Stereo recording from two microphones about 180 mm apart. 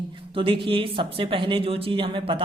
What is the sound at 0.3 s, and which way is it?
A man's voice, 30° right (ahead or behind).